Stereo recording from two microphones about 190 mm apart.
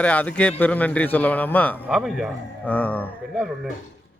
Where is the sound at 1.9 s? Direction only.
Centre (ahead or behind).